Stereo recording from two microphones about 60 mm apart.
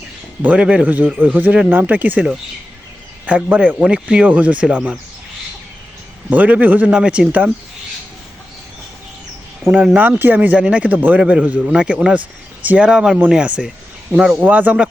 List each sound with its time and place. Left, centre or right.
0.4 s a man's voice: right
3.2 s a man's voice: right
4.3 s a man's voice: right
6.3 s a man's voice: right
9.7 s a man's voice: right
14.4 s a man's voice: right